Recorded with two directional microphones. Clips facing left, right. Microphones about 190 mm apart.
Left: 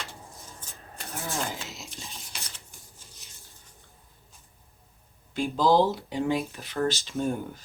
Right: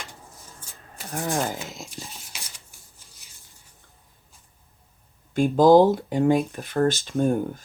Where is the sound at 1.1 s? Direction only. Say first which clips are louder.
Right 7 dB; 55° right (ahead or behind).